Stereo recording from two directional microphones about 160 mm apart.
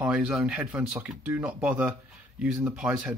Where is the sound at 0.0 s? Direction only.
5° right (ahead or behind).